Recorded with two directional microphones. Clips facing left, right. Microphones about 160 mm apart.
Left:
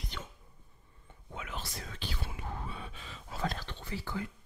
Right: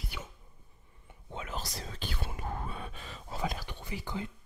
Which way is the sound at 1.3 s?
35° right (ahead or behind).